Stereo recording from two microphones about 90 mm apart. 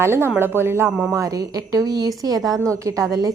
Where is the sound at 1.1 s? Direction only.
40° right (ahead or behind).